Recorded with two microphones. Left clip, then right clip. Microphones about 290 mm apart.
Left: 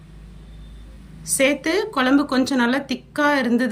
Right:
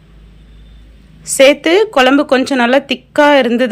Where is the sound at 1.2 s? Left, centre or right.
Centre.